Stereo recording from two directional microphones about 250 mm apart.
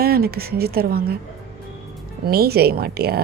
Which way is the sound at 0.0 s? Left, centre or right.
Right.